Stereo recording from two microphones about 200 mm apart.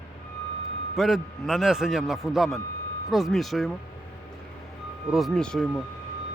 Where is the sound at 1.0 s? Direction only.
Centre (ahead or behind).